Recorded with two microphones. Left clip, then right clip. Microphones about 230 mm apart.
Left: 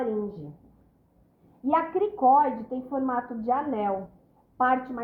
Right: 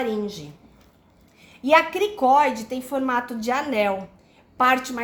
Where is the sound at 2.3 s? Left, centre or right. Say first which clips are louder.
Right 3 dB; right.